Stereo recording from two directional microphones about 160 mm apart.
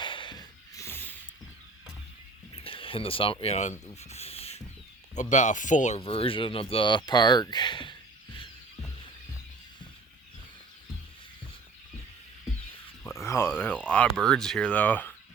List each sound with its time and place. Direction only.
0.0 s snort: 30° left (ahead or behind)
0.9 s a sound: 15° left (ahead or behind)
2.6 s speech: 35° left (ahead or behind); by 6.0 s 50° left (ahead or behind)
6.0 s speech: 35° left (ahead or behind)
13.1 s a sound: 15° left (ahead or behind)
13.9 s speech: 5° left (ahead or behind)